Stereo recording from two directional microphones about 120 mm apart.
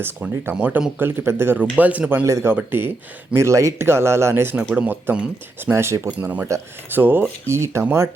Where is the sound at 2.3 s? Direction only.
25° right (ahead or behind).